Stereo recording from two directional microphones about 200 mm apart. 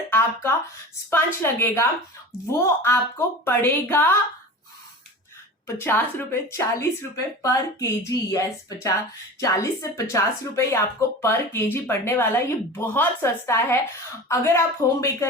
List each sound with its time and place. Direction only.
0.1 s a sound: 10° left (ahead or behind)
1.1 s speech: 10° left (ahead or behind)
5.6 s speech: 10° left (ahead or behind)